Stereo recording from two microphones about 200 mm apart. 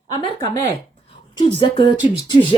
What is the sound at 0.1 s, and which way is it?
Speech, 20° left (ahead or behind).